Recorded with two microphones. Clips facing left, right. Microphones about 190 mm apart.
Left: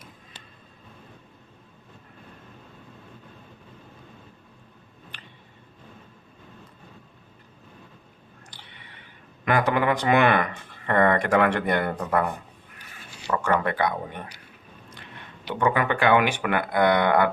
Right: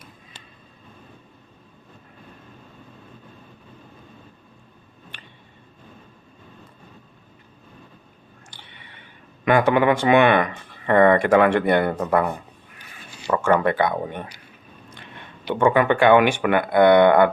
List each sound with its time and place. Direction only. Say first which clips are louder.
9.4 s speech: right 5 dB; 25° right (ahead or behind)
13.3 s speech: right 5 dB; 30° right (ahead or behind)